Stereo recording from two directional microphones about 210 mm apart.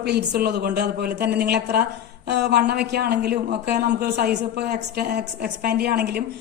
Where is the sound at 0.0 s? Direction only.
50° right (ahead or behind).